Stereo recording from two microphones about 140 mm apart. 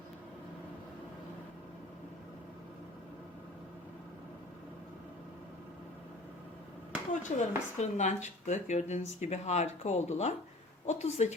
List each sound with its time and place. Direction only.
7.1 s a woman's voice: 60° left (ahead or behind)